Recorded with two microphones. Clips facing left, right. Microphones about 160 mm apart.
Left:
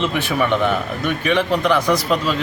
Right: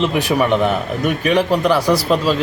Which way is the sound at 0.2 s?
40° right (ahead or behind).